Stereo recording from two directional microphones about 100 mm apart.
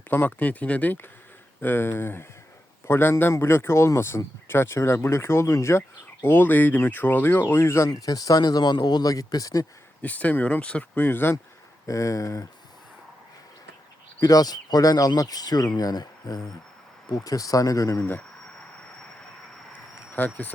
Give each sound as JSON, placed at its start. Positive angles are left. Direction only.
{"t": 0.1, "sound": "speech", "side_deg": 15}
{"t": 10.0, "sound": "speech", "side_deg": 15}
{"t": 11.9, "sound": "speech", "side_deg": 30}
{"t": 14.2, "sound": "speech", "side_deg": 40}
{"t": 19.7, "sound": "a sound", "side_deg": 15}